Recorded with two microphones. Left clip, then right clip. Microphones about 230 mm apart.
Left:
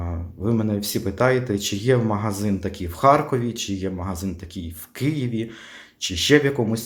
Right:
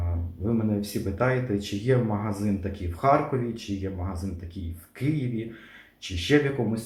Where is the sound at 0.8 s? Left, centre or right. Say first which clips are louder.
Left 6 dB; left.